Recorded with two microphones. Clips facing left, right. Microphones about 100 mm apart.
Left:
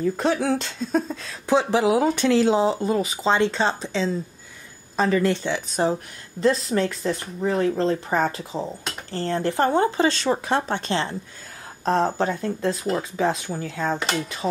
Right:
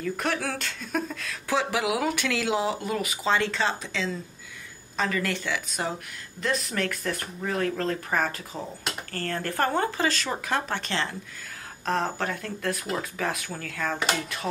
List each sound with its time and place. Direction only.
0.0 s speech: 25° left (ahead or behind)